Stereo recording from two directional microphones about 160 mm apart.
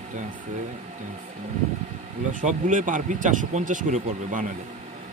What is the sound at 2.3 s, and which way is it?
Speech, 50° right (ahead or behind).